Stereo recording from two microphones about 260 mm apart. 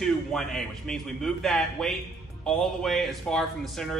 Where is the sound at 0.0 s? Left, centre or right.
Centre.